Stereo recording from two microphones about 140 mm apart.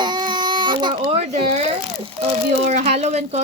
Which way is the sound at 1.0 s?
50° right (ahead or behind).